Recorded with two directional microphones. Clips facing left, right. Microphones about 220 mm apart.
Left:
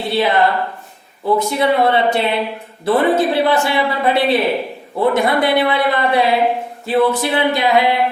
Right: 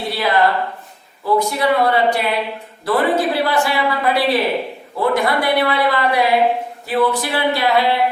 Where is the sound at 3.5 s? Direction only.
25° left (ahead or behind).